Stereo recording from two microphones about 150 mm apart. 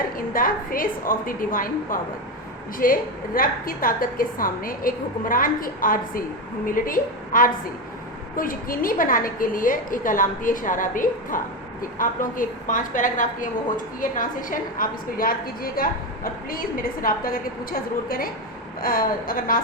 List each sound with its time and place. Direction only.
0.2 s a woman's voice: 70° left (ahead or behind)